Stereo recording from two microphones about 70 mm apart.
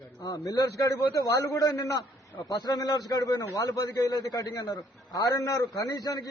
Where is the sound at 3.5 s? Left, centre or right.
Left.